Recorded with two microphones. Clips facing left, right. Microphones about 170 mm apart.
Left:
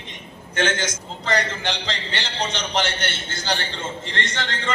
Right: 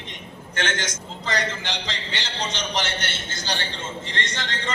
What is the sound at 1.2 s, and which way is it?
A man's voice, 60° left (ahead or behind).